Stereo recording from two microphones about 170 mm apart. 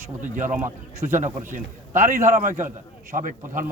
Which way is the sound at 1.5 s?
50° right (ahead or behind).